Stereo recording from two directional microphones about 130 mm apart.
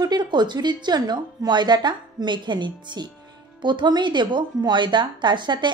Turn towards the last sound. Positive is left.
turn(degrees=-35)  # may be behind; listen again after turning